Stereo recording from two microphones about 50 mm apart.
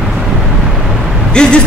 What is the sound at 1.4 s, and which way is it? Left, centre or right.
Speech, centre.